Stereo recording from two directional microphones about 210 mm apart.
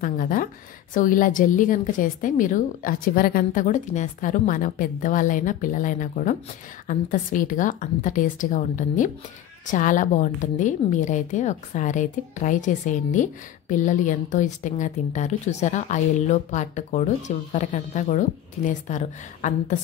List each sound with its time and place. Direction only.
0.0 s a woman's voice: 40° left (ahead or behind)